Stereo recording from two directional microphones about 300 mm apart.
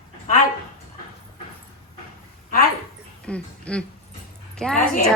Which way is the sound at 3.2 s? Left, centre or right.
Centre.